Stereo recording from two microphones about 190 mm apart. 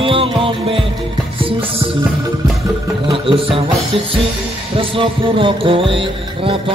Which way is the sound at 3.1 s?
30° right (ahead or behind).